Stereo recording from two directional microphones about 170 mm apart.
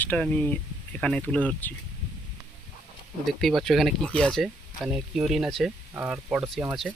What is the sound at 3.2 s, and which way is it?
Speech, centre (ahead or behind).